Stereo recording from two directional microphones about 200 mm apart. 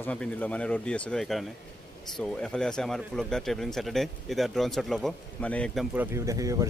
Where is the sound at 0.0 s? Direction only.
5° left (ahead or behind).